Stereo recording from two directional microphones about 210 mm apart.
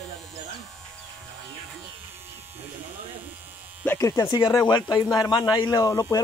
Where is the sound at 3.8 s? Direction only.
10° left (ahead or behind).